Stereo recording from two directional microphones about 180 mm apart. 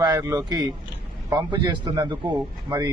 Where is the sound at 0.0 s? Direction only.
20° right (ahead or behind).